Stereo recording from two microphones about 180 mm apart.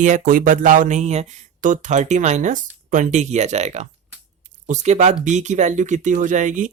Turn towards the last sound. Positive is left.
turn(degrees=-45)  # may be behind; listen again after turning